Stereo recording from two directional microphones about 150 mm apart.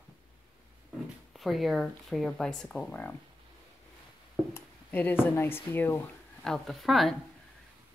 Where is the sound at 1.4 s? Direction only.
Centre (ahead or behind).